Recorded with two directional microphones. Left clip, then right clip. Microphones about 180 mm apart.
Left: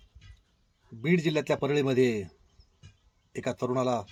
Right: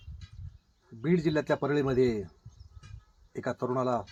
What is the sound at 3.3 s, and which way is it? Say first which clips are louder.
Speech: left 1 dB; 20° left (ahead or behind).